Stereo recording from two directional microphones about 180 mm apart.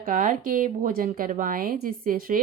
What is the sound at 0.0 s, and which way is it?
A woman's voice, 45° right (ahead or behind).